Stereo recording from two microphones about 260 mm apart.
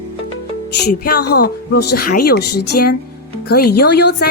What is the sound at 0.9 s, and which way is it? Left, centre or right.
A woman's voice, left.